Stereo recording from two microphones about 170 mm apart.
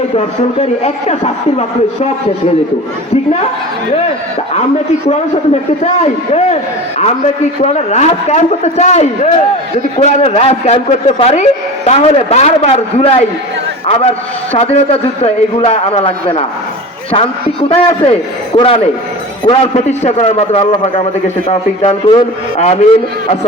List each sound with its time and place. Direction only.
0.6 s a man's voice: 35° left (ahead or behind)
5.8 s a man's voice: 40° left (ahead or behind)
7.6 s a man's voice: 40° left (ahead or behind)